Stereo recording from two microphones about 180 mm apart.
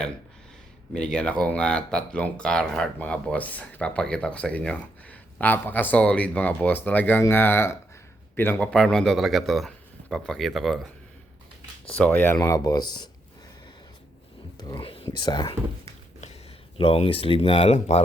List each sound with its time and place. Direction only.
0.9 s speech: 5° left (ahead or behind)
11.9 s speech: 10° left (ahead or behind)
12.4 s speech: 20° left (ahead or behind)
14.6 s speech: 25° left (ahead or behind)
16.2 s speech: 35° left (ahead or behind)